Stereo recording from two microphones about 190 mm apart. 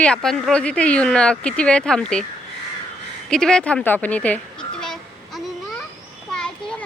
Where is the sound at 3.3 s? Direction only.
5° left (ahead or behind).